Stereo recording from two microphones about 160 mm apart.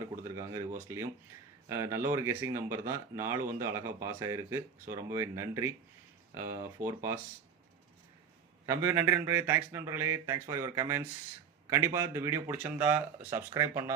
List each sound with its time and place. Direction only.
0.3 s speech: 20° right (ahead or behind)
8.6 s speech: 15° right (ahead or behind)